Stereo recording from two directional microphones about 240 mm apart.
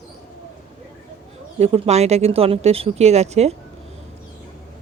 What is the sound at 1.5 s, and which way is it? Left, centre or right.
Speech, right.